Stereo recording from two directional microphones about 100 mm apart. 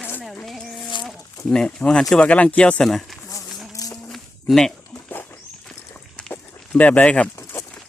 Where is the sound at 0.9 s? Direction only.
50° left (ahead or behind).